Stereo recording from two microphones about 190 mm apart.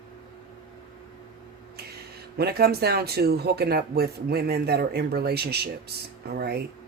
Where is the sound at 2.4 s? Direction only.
55° right (ahead or behind).